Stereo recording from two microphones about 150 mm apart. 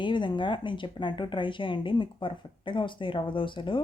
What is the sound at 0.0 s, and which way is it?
Speech, 30° left (ahead or behind).